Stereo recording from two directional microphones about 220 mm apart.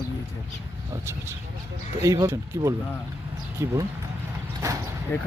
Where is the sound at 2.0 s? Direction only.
15° right (ahead or behind).